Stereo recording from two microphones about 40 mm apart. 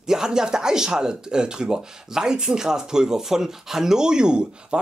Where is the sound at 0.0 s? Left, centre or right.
Centre.